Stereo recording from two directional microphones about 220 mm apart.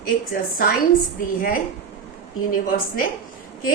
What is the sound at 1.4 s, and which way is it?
Speech, 40° left (ahead or behind).